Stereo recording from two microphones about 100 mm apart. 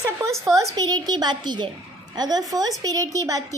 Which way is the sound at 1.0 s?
45° right (ahead or behind).